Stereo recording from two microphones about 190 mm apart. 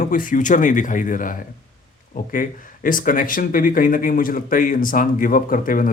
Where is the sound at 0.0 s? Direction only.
45° left (ahead or behind).